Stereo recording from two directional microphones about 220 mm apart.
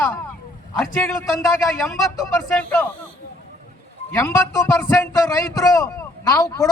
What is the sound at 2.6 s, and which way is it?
Speech, 5° left (ahead or behind).